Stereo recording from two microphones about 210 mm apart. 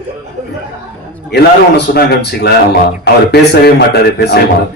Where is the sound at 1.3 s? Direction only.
50° left (ahead or behind).